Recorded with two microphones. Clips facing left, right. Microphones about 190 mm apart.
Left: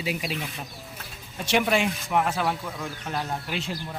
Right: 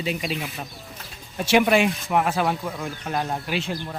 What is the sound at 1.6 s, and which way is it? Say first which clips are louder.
Speech: right 5 dB; 60° right (ahead or behind).